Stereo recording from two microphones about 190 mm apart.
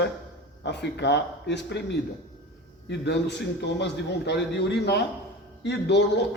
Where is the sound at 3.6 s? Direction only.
65° left (ahead or behind).